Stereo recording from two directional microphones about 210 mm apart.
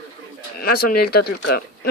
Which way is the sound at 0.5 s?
50° left (ahead or behind).